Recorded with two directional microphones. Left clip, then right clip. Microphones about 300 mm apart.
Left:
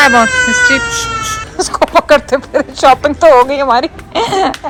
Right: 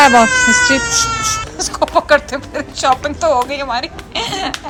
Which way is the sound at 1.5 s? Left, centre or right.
Centre.